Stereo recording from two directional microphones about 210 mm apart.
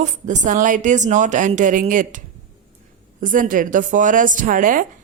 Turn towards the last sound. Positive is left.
turn(degrees=-40)  # may be behind; listen again after turning